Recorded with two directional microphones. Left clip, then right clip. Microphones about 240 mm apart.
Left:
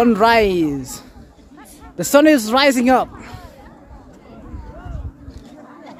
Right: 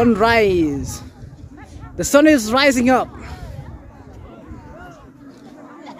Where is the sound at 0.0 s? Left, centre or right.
Centre.